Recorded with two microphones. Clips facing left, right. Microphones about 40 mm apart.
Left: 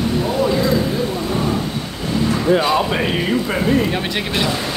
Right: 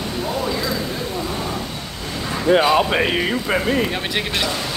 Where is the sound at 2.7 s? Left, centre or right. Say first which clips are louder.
Right 1 dB; centre.